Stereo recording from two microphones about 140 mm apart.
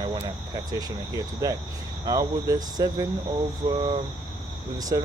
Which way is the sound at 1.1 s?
25° right (ahead or behind).